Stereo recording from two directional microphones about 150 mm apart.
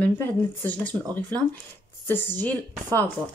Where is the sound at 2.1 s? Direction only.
15° left (ahead or behind).